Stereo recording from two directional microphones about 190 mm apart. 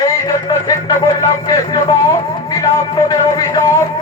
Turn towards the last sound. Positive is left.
turn(degrees=15)  # may be behind; listen again after turning